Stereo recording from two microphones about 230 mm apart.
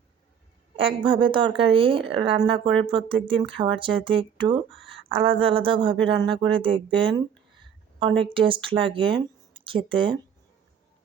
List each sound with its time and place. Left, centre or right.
0.8 s speech: right
8.2 s speech: right